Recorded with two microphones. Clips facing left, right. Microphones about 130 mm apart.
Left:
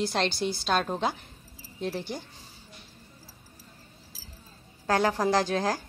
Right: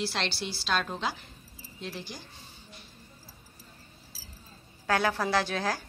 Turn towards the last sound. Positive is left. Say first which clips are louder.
# left 3 dB
turn(degrees=40)  # may be behind; listen again after turning